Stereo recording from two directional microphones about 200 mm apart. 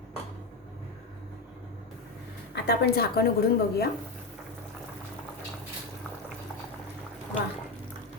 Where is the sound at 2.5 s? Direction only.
55° left (ahead or behind).